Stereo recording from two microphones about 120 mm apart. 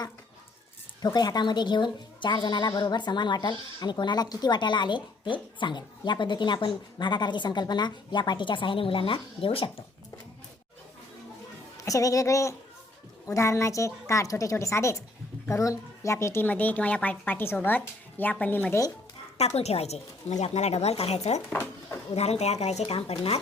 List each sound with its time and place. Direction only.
1.0 s speech: 35° left (ahead or behind); by 9.7 s 50° left (ahead or behind)
11.9 s a woman's voice: 30° left (ahead or behind)
19.4 s speech: 65° left (ahead or behind)
21.5 s speech: 20° left (ahead or behind)
22.1 s speech: 65° left (ahead or behind)